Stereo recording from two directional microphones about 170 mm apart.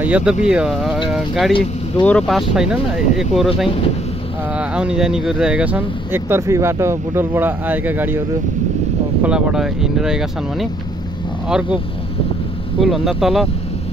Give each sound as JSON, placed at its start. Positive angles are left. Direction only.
{"t": 0.0, "sound": "speech", "side_deg": -5}
{"t": 3.6, "sound": "speech", "side_deg": 35}
{"t": 4.6, "sound": "speech", "side_deg": -5}
{"t": 9.2, "sound": "speech", "side_deg": -5}
{"t": 12.8, "sound": "speech", "side_deg": 0}